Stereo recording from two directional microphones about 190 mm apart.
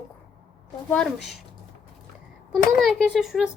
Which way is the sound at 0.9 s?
5° left (ahead or behind).